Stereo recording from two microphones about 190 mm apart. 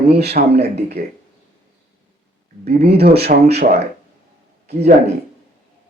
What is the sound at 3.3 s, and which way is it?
Speech, 40° right (ahead or behind).